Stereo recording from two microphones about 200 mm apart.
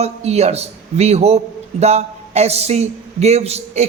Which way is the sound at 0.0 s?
30° right (ahead or behind).